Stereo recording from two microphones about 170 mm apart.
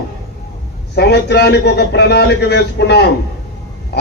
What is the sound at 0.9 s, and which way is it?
A man's voice, 80° left.